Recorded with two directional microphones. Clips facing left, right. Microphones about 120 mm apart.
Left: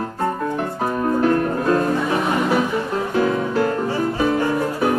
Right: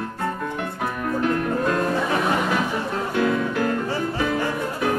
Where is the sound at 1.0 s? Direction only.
35° left (ahead or behind).